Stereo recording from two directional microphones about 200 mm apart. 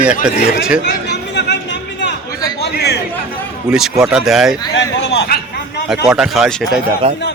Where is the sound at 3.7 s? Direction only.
Centre (ahead or behind).